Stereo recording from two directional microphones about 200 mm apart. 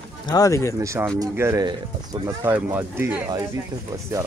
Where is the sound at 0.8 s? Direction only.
15° right (ahead or behind).